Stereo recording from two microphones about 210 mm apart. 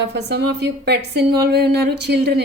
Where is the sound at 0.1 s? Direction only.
55° right (ahead or behind).